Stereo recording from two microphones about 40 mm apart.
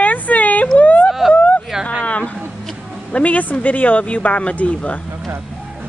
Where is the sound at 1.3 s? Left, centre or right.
Left.